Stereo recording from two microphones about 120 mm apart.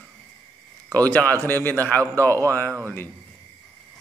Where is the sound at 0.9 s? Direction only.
15° left (ahead or behind).